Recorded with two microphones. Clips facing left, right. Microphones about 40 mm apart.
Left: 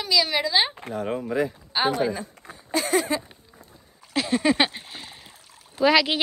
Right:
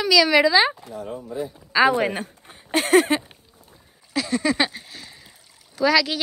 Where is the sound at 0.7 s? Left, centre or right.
Left.